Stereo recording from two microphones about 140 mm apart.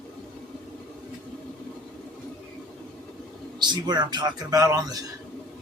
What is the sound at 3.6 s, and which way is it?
A man's voice, 30° right (ahead or behind).